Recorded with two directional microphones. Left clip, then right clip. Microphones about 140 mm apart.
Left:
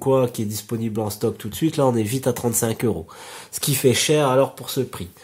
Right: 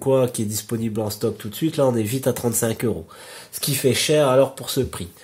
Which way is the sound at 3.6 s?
35° left (ahead or behind).